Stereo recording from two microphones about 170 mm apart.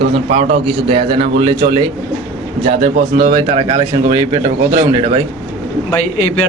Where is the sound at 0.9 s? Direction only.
30° right (ahead or behind).